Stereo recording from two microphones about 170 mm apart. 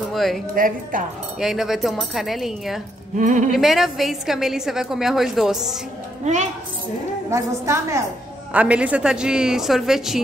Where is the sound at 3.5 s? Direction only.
Centre (ahead or behind).